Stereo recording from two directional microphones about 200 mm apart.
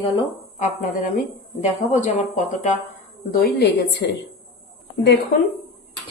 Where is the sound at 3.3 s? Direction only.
50° left (ahead or behind).